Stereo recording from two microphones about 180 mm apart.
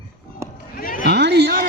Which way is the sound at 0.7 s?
50° left (ahead or behind).